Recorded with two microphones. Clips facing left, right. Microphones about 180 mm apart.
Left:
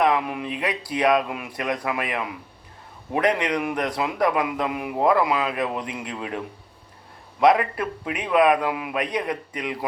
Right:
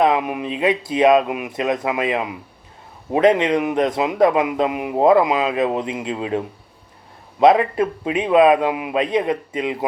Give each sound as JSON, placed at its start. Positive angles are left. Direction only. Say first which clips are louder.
{"t": 0.0, "sound": "a man's voice", "louder": "right 4 dB", "side_deg": -20}